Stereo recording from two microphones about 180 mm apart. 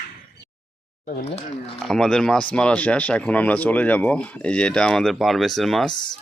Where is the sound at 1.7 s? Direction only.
Centre (ahead or behind).